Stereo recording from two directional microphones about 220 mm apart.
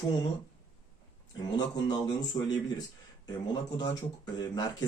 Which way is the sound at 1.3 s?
20° left (ahead or behind).